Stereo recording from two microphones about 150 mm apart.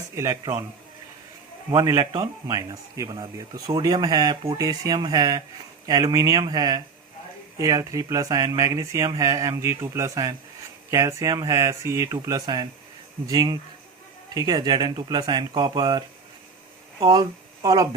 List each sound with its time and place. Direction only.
0.2 s a man's voice: 20° right (ahead or behind)
1.7 s a man's voice: 25° right (ahead or behind)
17.1 s speech: 25° right (ahead or behind)